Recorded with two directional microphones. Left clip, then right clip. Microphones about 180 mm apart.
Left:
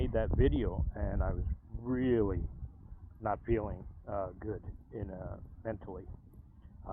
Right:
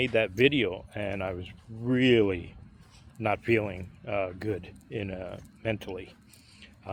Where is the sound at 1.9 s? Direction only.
60° right (ahead or behind).